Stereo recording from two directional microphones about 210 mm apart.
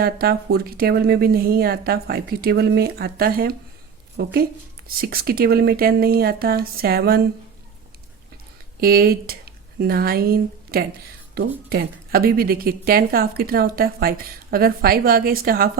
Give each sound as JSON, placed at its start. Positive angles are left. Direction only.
{"t": 0.0, "sound": "a woman's voice", "side_deg": -45}
{"t": 8.8, "sound": "a woman's voice", "side_deg": -45}